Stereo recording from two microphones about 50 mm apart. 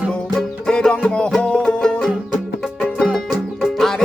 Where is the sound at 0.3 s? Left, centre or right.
Centre.